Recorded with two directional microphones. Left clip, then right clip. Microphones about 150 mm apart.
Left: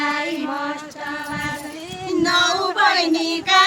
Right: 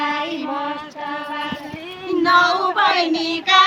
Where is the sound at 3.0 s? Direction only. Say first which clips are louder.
Even; 35° left (ahead or behind).